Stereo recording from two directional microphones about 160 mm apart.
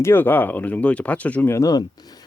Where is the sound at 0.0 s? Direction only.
15° left (ahead or behind).